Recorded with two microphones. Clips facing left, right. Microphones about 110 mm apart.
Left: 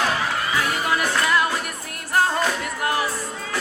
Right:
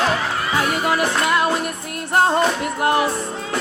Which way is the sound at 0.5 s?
25° right (ahead or behind).